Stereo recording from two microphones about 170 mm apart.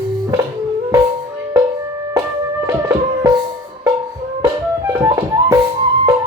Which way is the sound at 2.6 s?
20° right (ahead or behind).